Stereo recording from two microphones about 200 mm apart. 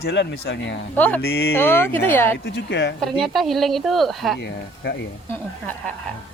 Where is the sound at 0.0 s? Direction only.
60° left (ahead or behind).